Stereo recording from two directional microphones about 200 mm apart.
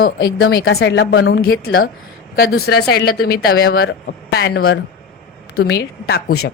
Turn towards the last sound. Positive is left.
turn(degrees=50)  # may be behind; listen again after turning